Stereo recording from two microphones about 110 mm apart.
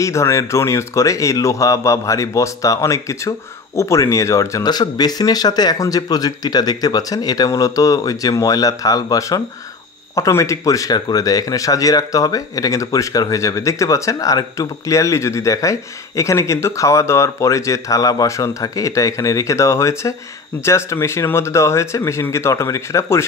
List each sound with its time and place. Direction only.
0.0 s speech: 25° left (ahead or behind)